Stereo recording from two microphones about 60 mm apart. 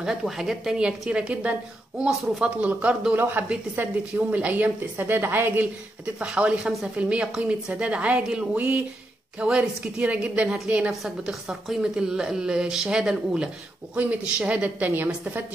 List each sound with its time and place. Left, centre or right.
0.0 s speech: centre
2.6 s a woman's voice: right
2.9 s speech: centre
3.4 s a woman's voice: right
6.1 s a woman's voice: centre
10.9 s speech: centre
13.9 s a woman's voice: right